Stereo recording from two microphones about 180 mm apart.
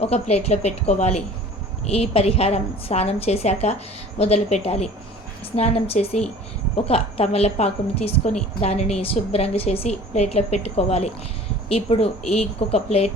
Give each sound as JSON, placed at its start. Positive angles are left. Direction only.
{"t": 0.0, "sound": "a woman's voice", "side_deg": 35}